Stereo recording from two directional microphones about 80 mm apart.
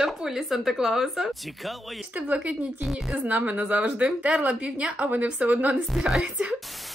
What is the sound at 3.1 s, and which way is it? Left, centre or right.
A woman's voice, centre.